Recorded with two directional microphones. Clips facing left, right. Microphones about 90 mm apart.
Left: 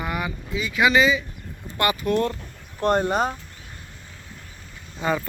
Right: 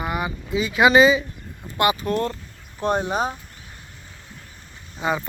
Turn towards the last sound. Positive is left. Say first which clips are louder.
# even
turn(degrees=-15)  # may be behind; listen again after turning